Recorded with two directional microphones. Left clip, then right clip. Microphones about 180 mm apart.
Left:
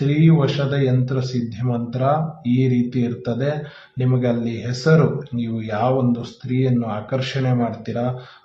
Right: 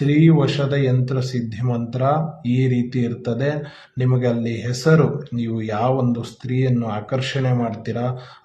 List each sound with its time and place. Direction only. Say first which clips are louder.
0.0 s speech: right 2 dB; 25° right (ahead or behind)